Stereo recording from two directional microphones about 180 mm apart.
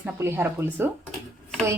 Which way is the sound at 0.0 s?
10° right (ahead or behind).